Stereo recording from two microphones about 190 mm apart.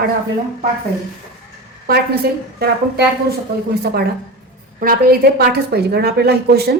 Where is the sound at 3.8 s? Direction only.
55° right (ahead or behind).